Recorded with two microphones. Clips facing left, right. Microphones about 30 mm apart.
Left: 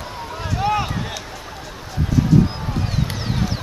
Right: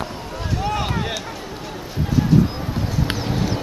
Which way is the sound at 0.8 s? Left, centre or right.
Centre.